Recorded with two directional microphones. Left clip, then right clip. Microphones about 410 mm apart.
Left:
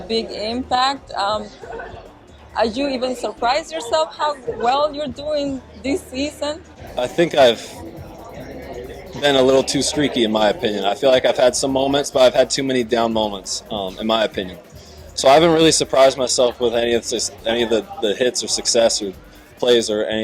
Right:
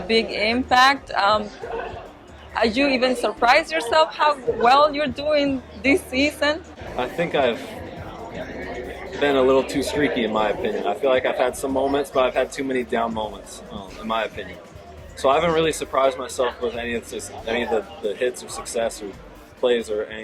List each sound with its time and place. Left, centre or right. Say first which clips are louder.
0.1 s speech: right 3 dB; centre
2.6 s a woman's voice: even; centre
7.0 s a man's voice: left 7 dB; left
9.2 s a man's voice: left 3 dB; left